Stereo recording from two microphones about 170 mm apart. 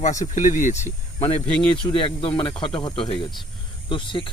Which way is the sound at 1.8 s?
30° left (ahead or behind).